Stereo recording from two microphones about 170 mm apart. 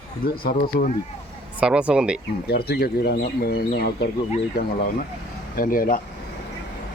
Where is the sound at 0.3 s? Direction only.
60° left (ahead or behind).